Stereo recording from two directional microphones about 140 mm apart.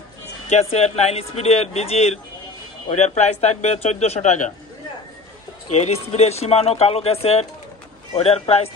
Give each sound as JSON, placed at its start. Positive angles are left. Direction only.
{"t": 0.5, "sound": "speech", "side_deg": 50}
{"t": 5.8, "sound": "speech", "side_deg": 50}